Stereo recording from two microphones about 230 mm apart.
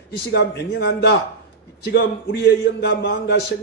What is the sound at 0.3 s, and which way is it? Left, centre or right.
A man's voice, left.